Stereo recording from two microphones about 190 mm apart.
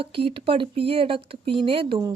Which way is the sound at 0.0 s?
30° right (ahead or behind).